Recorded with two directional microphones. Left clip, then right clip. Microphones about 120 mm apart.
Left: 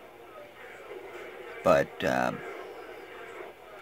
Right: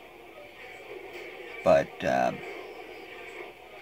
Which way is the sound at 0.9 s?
55° right (ahead or behind).